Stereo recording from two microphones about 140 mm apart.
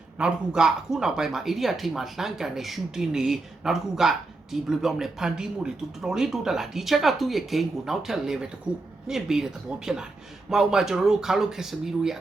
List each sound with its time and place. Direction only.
0.2 s speech: 5° right (ahead or behind)